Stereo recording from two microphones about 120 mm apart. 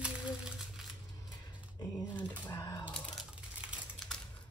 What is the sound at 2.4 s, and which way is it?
Speech, 30° left (ahead or behind).